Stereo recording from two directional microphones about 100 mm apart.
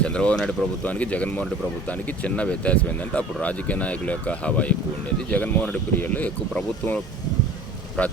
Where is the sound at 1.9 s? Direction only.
15° left (ahead or behind).